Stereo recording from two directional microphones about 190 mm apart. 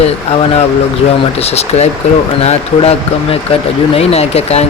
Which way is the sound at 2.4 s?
30° left (ahead or behind).